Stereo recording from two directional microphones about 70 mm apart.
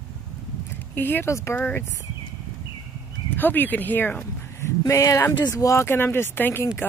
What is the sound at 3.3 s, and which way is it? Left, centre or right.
Speech, left.